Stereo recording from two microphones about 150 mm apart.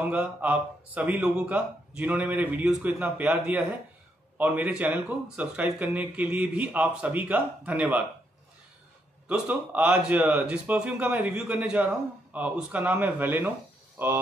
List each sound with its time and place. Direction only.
0.0 s speech: 10° right (ahead or behind)
9.3 s speech: 10° right (ahead or behind)